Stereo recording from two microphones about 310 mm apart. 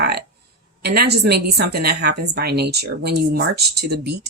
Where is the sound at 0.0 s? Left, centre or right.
Right.